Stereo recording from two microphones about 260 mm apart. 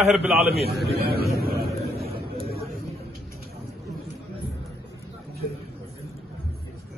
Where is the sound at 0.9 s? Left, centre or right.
Right.